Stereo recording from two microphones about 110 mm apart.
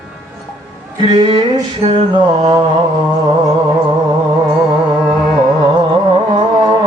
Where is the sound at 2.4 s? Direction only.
35° right (ahead or behind).